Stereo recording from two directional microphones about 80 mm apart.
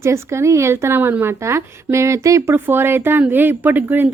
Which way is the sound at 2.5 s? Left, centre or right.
Right.